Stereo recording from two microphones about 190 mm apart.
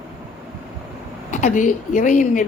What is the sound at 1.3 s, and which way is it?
A woman's voice, 40° left (ahead or behind).